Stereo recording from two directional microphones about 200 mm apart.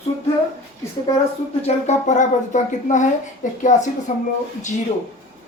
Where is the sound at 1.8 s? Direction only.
35° left (ahead or behind).